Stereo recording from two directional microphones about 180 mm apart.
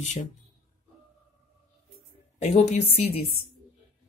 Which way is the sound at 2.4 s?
35° left (ahead or behind).